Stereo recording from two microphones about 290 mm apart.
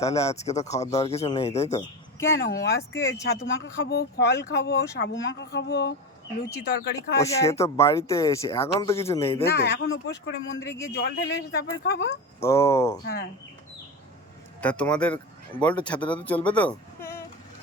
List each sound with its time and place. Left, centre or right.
0.0 s speech: centre
0.3 s speech: left
2.1 s speech: centre
3.2 s speech: left
7.2 s speech: centre
9.6 s speech: left
12.4 s speech: centre
14.6 s speech: centre